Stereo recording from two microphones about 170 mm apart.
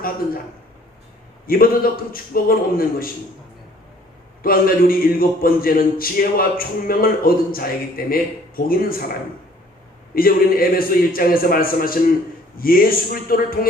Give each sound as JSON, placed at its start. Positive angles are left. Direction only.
{"t": 1.5, "sound": "speech", "side_deg": 60}
{"t": 4.4, "sound": "speech", "side_deg": 60}
{"t": 10.2, "sound": "speech", "side_deg": 60}